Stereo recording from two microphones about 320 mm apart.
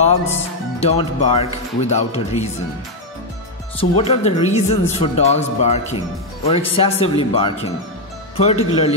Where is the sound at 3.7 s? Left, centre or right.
Centre.